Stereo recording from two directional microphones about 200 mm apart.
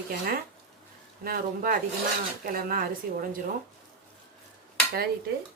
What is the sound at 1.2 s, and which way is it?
Speech, 45° right (ahead or behind).